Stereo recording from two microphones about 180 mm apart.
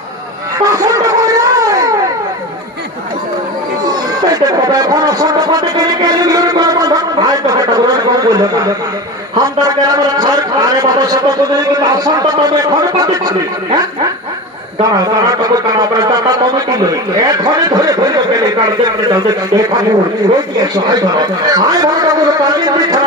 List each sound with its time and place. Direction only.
0.7 s a sound: 20° right (ahead or behind)
4.3 s speech: 20° right (ahead or behind)
15.0 s speech: 20° right (ahead or behind)